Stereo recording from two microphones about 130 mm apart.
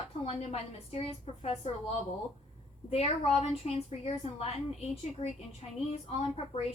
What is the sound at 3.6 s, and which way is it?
A woman's voice, 55° left (ahead or behind).